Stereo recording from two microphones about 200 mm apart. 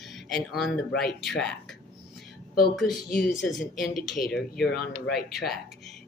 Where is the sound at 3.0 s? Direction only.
45° left (ahead or behind).